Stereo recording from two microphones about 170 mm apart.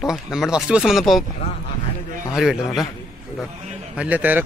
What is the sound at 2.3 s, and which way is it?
Speech, 5° right (ahead or behind).